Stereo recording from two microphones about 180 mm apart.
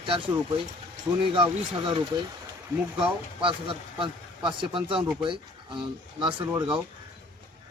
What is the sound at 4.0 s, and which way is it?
Speech, 30° right (ahead or behind).